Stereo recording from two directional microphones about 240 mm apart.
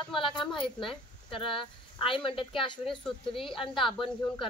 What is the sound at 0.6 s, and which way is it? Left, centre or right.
A woman's voice, left.